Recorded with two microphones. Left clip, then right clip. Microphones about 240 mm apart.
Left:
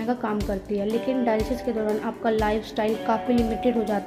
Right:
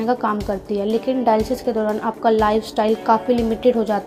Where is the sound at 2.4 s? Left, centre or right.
Right.